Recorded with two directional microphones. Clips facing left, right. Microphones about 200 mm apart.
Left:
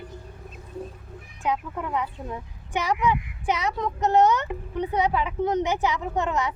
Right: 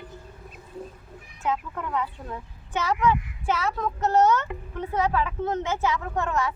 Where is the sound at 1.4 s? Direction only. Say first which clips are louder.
Left 1 dB; 15° left (ahead or behind).